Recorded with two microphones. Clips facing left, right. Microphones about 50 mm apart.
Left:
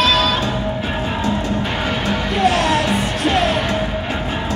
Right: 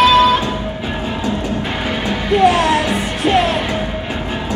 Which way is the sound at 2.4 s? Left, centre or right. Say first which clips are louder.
Right 3 dB; centre.